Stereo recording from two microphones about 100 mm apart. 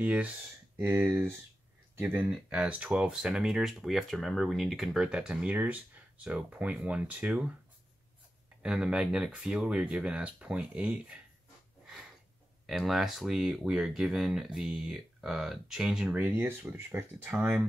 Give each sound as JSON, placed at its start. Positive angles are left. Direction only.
{"t": 0.0, "sound": "speech", "side_deg": -15}
{"t": 2.2, "sound": "speech", "side_deg": -10}
{"t": 8.6, "sound": "speech", "side_deg": -10}
{"t": 11.8, "sound": "a sound", "side_deg": -5}
{"t": 12.6, "sound": "speech", "side_deg": 0}
{"t": 16.2, "sound": "speech", "side_deg": -20}
{"t": 17.3, "sound": "speech", "side_deg": -10}